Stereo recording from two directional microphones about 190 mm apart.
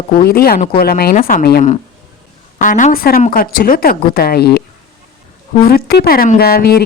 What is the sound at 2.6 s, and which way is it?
A woman's voice, 45° left (ahead or behind).